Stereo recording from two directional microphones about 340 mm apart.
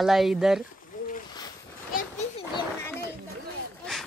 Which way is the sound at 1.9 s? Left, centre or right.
Centre.